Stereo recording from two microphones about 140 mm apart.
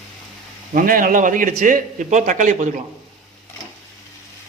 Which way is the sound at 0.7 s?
80° right.